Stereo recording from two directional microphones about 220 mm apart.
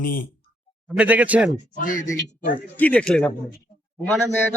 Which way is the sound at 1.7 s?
35° left (ahead or behind).